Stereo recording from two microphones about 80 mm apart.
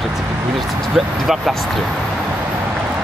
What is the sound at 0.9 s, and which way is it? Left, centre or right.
Speech, centre.